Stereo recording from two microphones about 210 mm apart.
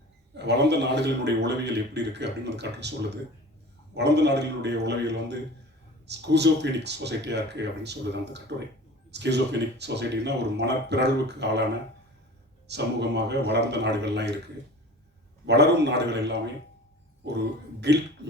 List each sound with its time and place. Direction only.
0.3 s a man's voice: 55° right (ahead or behind)
12.6 s a man's voice: 55° right (ahead or behind)